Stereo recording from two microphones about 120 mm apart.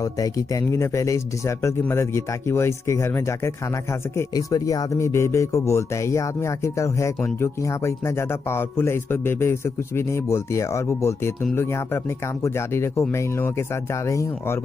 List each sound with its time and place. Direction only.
0.2 s speech: 25° left (ahead or behind)
12.4 s speech: 20° left (ahead or behind)
14.0 s speech: 25° left (ahead or behind)